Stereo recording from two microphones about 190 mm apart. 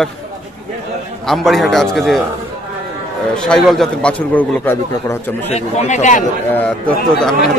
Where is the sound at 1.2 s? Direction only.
Centre (ahead or behind).